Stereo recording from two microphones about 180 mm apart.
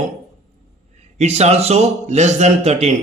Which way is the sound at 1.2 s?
35° right (ahead or behind).